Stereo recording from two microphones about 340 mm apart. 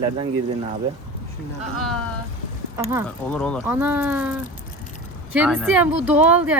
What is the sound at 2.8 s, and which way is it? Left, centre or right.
Speech, centre.